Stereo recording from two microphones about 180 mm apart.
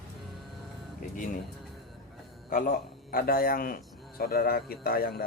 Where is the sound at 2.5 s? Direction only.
50° left (ahead or behind).